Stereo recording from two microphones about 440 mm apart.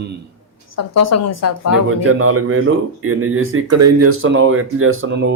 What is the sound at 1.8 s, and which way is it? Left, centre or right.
Speech, right.